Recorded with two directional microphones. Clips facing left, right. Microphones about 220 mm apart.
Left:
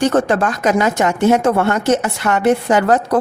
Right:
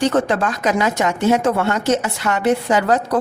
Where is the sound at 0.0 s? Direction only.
45° left (ahead or behind).